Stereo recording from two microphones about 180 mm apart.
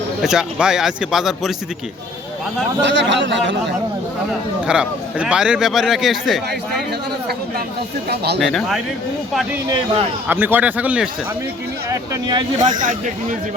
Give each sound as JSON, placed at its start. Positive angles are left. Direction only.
{"t": 0.2, "sound": "speech", "side_deg": -5}
{"t": 2.8, "sound": "speech", "side_deg": -85}
{"t": 4.6, "sound": "speech", "side_deg": -5}
{"t": 8.1, "sound": "speech", "side_deg": -65}
{"t": 8.4, "sound": "speech", "side_deg": 0}
{"t": 10.2, "sound": "speech", "side_deg": -10}
{"t": 11.9, "sound": "speech", "side_deg": -20}
{"t": 12.5, "sound": "speech", "side_deg": -45}